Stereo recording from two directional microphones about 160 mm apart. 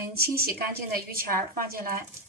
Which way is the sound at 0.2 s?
70° right (ahead or behind).